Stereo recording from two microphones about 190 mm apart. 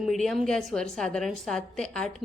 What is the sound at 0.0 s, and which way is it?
A woman's voice, centre (ahead or behind).